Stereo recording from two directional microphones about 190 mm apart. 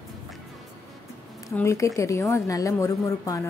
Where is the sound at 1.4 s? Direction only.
15° left (ahead or behind).